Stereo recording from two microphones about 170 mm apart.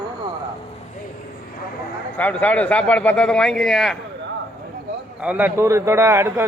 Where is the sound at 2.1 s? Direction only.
10° left (ahead or behind).